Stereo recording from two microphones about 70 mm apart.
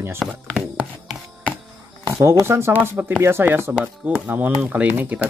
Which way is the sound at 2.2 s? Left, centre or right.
Right.